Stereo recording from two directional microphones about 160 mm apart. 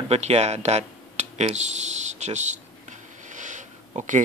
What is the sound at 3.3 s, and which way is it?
Sniff, 50° right (ahead or behind).